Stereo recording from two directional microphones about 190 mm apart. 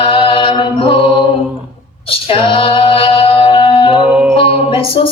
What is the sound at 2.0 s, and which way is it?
Singing, 30° left (ahead or behind).